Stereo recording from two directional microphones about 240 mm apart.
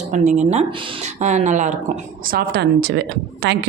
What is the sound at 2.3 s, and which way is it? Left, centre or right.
Speech, right.